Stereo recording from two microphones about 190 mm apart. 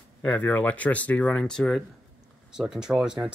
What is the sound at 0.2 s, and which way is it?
Speech, 10° left (ahead or behind).